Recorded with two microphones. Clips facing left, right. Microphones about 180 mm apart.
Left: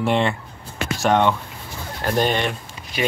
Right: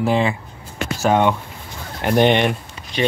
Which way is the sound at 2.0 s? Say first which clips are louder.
Right 5 dB; 20° right (ahead or behind).